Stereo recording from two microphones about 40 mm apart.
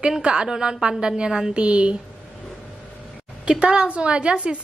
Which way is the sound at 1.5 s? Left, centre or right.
Right.